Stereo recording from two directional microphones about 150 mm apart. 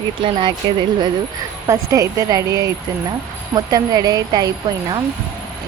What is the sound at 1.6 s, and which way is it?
Speech, 20° right (ahead or behind).